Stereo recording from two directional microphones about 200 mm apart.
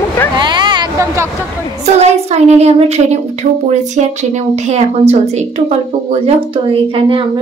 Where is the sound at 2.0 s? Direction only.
35° right (ahead or behind).